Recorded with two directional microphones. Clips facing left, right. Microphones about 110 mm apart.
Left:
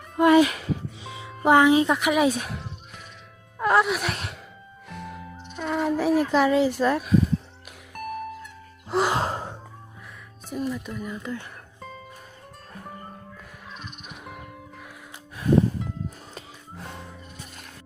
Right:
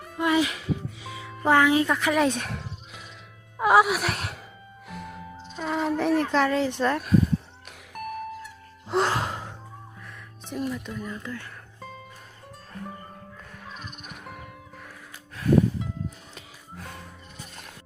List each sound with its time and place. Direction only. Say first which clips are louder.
0.2 s speech: left 7 dB; 55° left (ahead or behind)
1.0 s speech: left 3 dB; 25° left (ahead or behind); by 2.6 s 5° left (ahead or behind)
3.6 s speech: right 2 dB; 5° right (ahead or behind)
7.9 s music: even; 5° right (ahead or behind)
8.9 s sigh: left 1 dB; 5° left (ahead or behind)
9.1 s gasp: left 3 dB; 35° left (ahead or behind)
10.5 s speech: left 1 dB; centre (ahead or behind)
11.2 s speech: left 3 dB; 20° left (ahead or behind)
13.7 s music: left 2 dB; centre (ahead or behind)
16.3 s music: left 3 dB; 30° left (ahead or behind)